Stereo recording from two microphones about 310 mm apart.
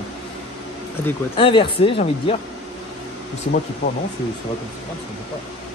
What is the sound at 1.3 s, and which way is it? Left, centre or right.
Speech, centre.